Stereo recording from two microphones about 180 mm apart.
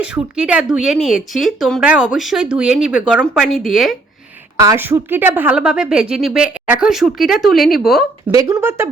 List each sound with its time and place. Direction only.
0.0 s speech: 5° right (ahead or behind)
4.6 s speech: 15° right (ahead or behind)
8.3 s speech: 20° right (ahead or behind)